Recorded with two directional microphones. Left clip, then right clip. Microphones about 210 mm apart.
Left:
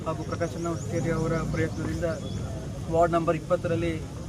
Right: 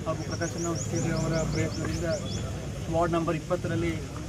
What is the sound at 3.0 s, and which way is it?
Speech, 20° left (ahead or behind).